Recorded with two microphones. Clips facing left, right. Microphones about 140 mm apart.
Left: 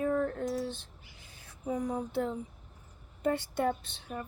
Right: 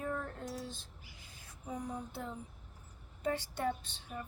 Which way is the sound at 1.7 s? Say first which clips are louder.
Left 8 dB; 90° left.